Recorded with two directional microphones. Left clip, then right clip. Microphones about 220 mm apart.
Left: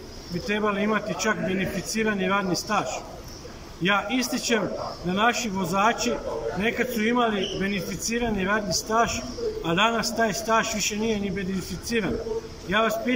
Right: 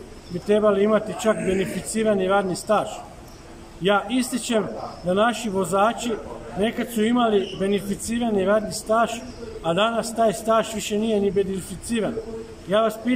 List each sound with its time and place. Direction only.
0.5 s a man's voice: 15° right (ahead or behind)